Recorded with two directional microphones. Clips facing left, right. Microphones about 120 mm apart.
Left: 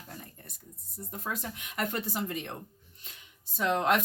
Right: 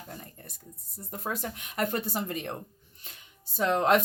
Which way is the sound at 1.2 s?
35° right (ahead or behind).